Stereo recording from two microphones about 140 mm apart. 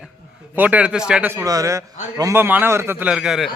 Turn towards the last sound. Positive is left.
turn(degrees=-5)  # may be behind; listen again after turning